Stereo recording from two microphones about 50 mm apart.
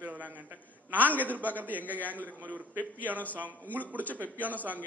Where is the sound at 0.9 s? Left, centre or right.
Right.